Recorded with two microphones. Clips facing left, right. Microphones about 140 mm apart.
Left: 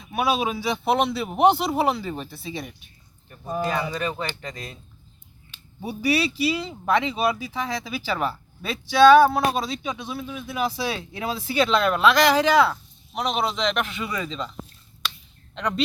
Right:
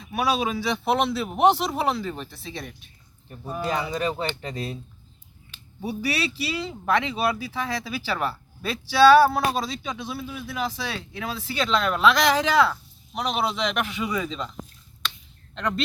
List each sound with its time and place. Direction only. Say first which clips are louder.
0.0 s speech: left 1 dB; centre (ahead or behind)
4.0 s speech: right 2 dB; 30° right (ahead or behind)
5.5 s speech: right 2 dB; centre (ahead or behind)
10.6 s speech: left 4 dB; 10° left (ahead or behind); by 14.5 s 5° right (ahead or behind)
15.5 s speech: even; centre (ahead or behind)